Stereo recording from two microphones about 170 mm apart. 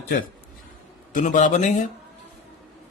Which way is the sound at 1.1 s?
45° left (ahead or behind).